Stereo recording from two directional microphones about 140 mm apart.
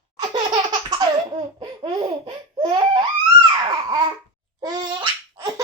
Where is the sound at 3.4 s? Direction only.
30° right (ahead or behind).